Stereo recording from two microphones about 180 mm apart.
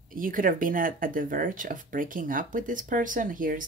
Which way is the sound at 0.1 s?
50° right (ahead or behind).